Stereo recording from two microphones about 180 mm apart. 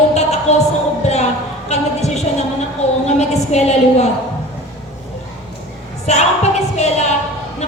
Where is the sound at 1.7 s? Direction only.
40° left (ahead or behind).